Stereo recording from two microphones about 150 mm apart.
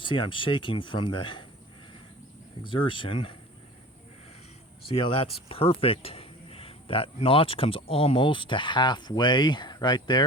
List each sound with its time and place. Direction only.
0.0 s speech: 35° left (ahead or behind)
2.6 s speech: 35° left (ahead or behind)
4.9 s speech: 35° left (ahead or behind)